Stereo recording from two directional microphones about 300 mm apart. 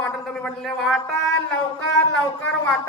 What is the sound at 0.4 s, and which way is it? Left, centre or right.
Speech, centre.